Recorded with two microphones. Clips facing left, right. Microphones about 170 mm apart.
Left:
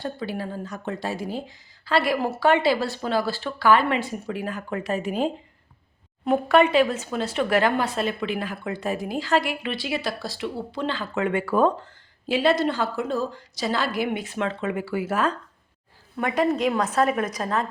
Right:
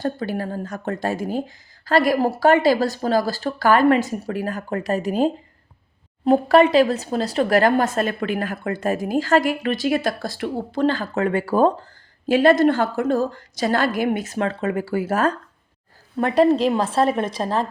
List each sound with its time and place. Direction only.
0.0 s a woman's voice: 45° right (ahead or behind); by 17.7 s 30° right (ahead or behind)